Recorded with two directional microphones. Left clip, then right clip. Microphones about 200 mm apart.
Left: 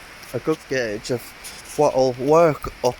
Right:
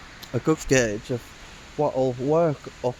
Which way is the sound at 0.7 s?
65° right (ahead or behind).